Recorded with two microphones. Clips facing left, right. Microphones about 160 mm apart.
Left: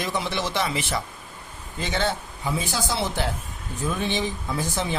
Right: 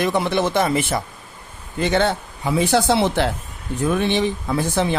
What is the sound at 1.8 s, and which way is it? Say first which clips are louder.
Speech: right 7 dB; 60° right (ahead or behind).